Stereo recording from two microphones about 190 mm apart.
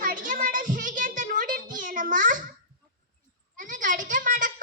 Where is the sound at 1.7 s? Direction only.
45° right (ahead or behind).